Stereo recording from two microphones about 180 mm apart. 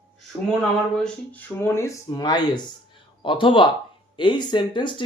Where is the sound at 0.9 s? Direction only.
5° left (ahead or behind).